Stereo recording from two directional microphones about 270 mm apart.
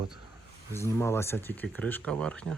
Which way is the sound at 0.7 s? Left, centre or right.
Centre.